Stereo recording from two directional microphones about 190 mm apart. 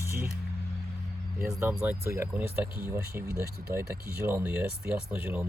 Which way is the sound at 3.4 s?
55° right (ahead or behind).